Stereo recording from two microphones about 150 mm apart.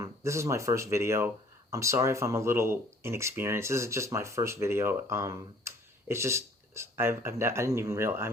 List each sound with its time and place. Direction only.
0.0 s speech: 20° right (ahead or behind)